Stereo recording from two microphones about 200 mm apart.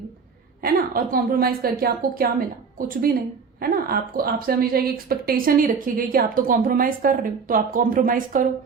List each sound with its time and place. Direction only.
0.6 s speech: 45° right (ahead or behind)